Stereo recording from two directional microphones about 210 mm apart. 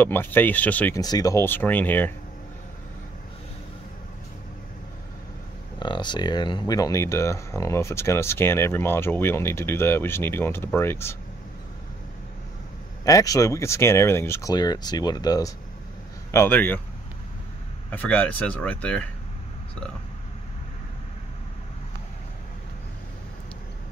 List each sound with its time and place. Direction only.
0.0 s speech: 10° left (ahead or behind)
5.8 s speech: 20° left (ahead or behind)
13.0 s speech: 15° left (ahead or behind)
17.9 s speech: 5° left (ahead or behind)